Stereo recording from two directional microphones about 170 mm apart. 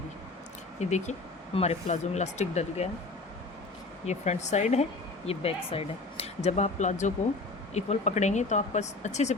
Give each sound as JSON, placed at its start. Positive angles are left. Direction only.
{"t": 0.8, "sound": "speech", "side_deg": 45}
{"t": 4.0, "sound": "speech", "side_deg": 40}